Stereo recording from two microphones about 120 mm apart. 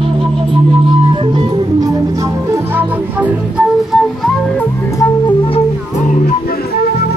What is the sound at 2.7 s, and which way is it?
Music, 15° right (ahead or behind).